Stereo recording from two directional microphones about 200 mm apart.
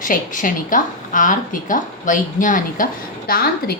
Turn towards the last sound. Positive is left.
turn(degrees=50)  # may be behind; listen again after turning